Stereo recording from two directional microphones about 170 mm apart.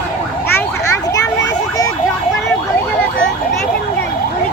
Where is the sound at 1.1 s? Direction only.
20° left (ahead or behind).